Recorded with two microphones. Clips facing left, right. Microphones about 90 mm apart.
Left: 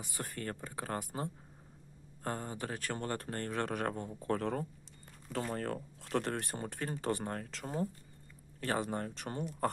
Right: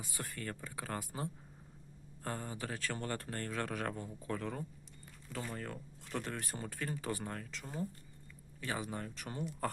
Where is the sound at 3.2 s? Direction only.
35° left (ahead or behind); by 6.5 s 55° left (ahead or behind).